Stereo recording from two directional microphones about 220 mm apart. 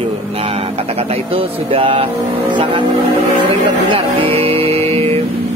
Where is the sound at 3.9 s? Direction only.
25° right (ahead or behind).